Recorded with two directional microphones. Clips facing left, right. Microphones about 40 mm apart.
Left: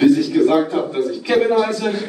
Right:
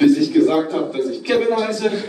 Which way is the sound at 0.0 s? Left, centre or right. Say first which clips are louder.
Even; centre.